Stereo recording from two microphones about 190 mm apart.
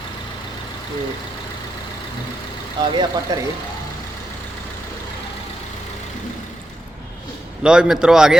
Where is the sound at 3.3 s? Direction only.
20° right (ahead or behind).